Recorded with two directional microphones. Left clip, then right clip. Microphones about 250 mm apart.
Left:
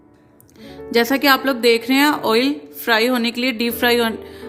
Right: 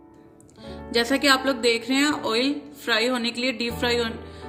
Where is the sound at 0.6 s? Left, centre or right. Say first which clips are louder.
Left 6 dB; left.